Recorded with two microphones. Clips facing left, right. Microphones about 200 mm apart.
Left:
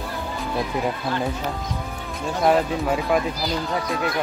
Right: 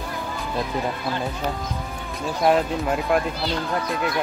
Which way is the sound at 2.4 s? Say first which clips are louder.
Even; centre (ahead or behind).